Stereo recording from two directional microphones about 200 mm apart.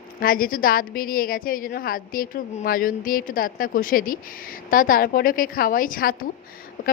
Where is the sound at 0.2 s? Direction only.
45° left (ahead or behind).